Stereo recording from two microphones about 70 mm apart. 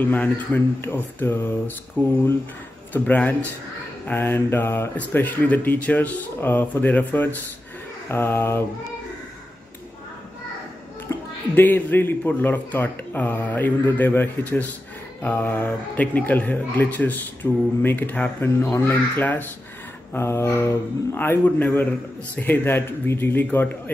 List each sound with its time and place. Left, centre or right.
0.0 s speech: left
11.1 s music: left
11.5 s speech: left
20.2 s speech: left